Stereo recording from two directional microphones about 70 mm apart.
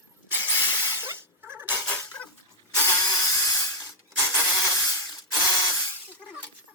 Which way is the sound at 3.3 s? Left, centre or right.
Left.